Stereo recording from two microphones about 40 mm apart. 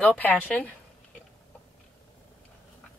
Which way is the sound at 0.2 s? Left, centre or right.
Left.